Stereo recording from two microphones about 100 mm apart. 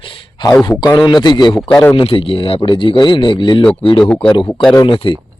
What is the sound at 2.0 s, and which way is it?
Speech, 65° left (ahead or behind).